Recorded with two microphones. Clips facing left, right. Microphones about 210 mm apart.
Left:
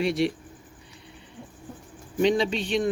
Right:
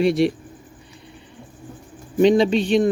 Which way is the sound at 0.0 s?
35° right (ahead or behind).